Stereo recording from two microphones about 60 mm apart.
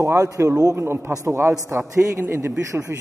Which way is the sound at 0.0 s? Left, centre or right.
Right.